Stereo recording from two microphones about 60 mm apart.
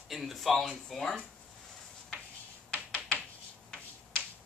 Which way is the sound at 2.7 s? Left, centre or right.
Left.